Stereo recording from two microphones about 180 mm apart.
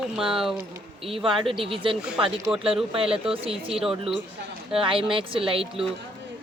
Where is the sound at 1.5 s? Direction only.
30° right (ahead or behind).